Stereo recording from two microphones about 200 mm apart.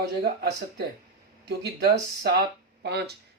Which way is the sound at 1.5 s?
55° right (ahead or behind).